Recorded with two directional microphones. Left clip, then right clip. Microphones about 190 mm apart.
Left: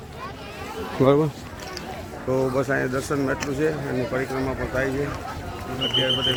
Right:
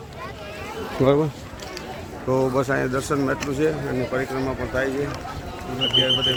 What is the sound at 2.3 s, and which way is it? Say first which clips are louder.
Speech: right 2 dB; 30° right (ahead or behind).